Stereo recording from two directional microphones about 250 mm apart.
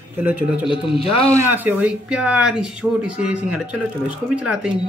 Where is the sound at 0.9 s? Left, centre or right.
Left.